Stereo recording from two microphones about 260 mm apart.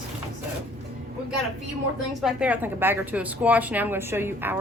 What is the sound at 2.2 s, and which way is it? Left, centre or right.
Speech, centre.